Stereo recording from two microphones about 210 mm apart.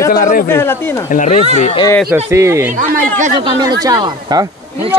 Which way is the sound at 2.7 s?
40° right (ahead or behind).